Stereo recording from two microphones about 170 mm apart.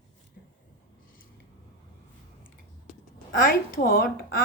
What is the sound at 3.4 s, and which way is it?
Speech, 55° left (ahead or behind).